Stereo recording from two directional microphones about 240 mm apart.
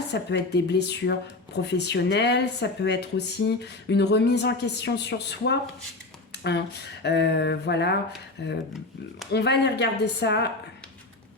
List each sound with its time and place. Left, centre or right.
0.1 s speech: left
6.3 s a sound: left
7.0 s speech: left